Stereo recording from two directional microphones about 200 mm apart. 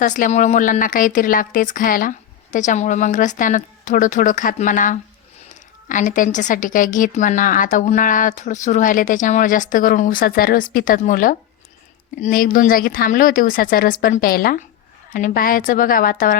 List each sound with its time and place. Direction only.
0.0 s a woman's voice: 40° left (ahead or behind)